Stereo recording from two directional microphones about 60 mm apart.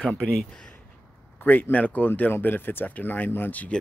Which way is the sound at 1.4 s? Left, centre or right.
Left.